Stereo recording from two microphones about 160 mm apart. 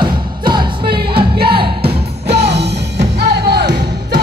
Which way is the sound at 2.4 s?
90° right.